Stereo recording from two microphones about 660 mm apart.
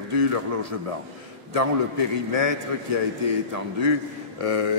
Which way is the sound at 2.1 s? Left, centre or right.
Right.